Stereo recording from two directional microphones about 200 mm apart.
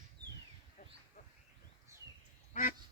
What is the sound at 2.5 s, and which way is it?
Duck, 45° left (ahead or behind).